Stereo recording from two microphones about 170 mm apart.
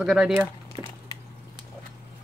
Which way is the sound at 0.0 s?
5° right (ahead or behind).